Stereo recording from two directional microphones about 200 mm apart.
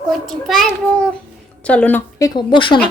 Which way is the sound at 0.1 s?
Centre (ahead or behind).